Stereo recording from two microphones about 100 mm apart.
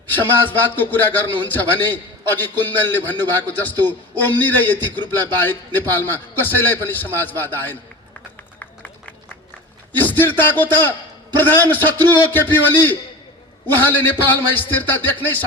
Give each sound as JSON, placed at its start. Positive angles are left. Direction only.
{"t": 0.1, "sound": "a man's voice", "side_deg": 20}
{"t": 8.5, "sound": "a sound", "side_deg": 15}
{"t": 10.0, "sound": "a man's voice", "side_deg": 20}